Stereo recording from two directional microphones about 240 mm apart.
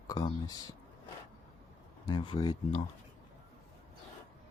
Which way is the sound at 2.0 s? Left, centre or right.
Centre.